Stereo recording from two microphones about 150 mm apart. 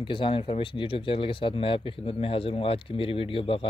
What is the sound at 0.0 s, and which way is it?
Speech, 35° left (ahead or behind).